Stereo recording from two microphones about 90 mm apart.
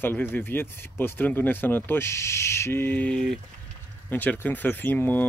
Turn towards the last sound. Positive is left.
turn(degrees=20)  # may be behind; listen again after turning